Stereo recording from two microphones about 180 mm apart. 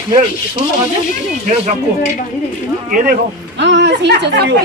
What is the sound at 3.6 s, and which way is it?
Speech, 75° right (ahead or behind).